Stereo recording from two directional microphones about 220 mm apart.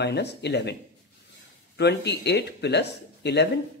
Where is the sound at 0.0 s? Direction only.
50° left (ahead or behind).